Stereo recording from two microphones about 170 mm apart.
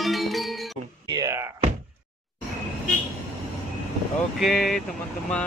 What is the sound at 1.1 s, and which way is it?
Music, 20° right (ahead or behind).